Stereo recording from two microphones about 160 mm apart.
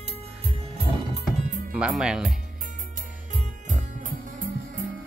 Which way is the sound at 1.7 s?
5° right (ahead or behind).